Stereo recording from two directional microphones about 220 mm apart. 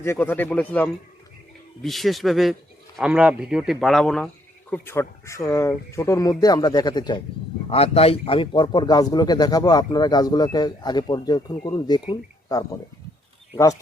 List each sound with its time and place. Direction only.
0.0 s a man's voice: 10° left (ahead or behind)